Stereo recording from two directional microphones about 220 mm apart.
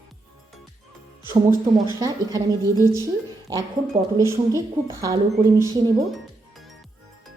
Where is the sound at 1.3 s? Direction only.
15° right (ahead or behind).